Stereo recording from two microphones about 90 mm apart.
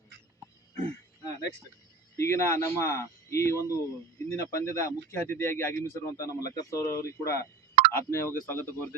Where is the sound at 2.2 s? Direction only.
30° left (ahead or behind).